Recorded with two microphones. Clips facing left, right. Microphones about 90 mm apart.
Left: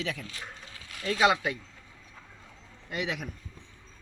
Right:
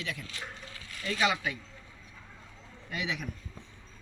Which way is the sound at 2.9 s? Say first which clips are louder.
Left 2 dB; 40° left (ahead or behind).